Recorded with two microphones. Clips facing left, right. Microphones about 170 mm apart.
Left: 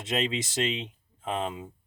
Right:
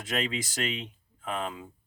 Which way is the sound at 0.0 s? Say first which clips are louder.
Left 2 dB; 25° left (ahead or behind).